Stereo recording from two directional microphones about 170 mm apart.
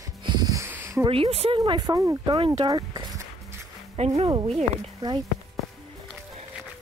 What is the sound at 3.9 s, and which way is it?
Speech, 40° right (ahead or behind).